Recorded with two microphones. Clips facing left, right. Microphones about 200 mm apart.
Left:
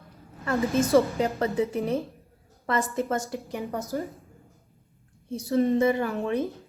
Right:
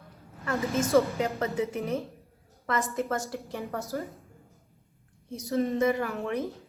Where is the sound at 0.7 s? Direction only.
35° left (ahead or behind); by 3.8 s 15° left (ahead or behind).